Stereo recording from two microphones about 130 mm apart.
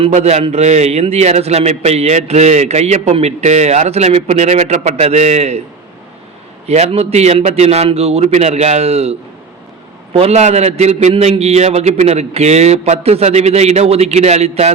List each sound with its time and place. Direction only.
0.1 s a man's voice: 55° right (ahead or behind)
6.7 s a man's voice: 55° right (ahead or behind)